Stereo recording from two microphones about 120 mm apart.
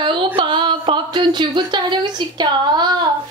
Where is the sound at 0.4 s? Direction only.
45° right (ahead or behind).